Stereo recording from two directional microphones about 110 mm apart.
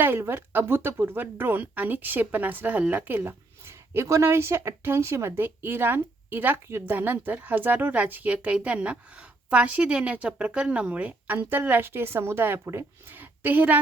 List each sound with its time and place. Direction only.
0.0 s a woman's voice: 20° right (ahead or behind)